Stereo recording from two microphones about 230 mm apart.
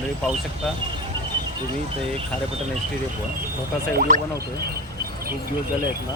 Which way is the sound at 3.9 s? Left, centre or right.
Right.